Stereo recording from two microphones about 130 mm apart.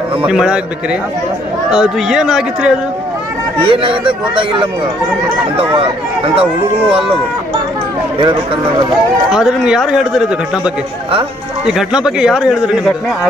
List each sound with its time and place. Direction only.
0.3 s speech: 5° right (ahead or behind)
1.7 s speech: 5° right (ahead or behind)
3.6 s speech: 40° right (ahead or behind)
8.2 s speech: 40° right (ahead or behind)
9.3 s speech: 5° right (ahead or behind)